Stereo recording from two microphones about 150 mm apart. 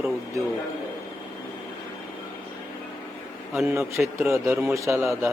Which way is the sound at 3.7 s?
15° right (ahead or behind).